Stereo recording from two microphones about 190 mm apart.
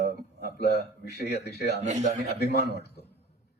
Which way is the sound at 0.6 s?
60° left (ahead or behind).